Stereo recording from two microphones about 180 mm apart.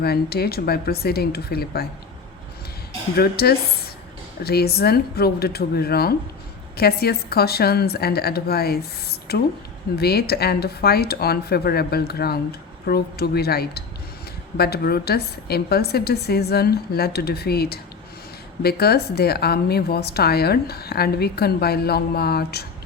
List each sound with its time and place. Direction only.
0.0 s a woman's voice: 60° left (ahead or behind)
3.2 s a woman's voice: 60° left (ahead or behind)